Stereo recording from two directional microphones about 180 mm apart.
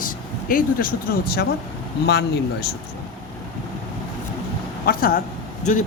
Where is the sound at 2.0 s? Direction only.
70° left (ahead or behind).